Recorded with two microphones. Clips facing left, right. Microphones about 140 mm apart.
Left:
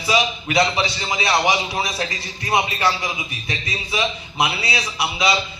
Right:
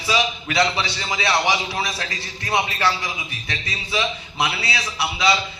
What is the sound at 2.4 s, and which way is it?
Speech, 20° left (ahead or behind).